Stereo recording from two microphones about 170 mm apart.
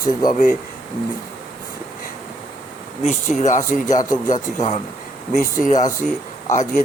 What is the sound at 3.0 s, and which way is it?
Speech, 45° left (ahead or behind).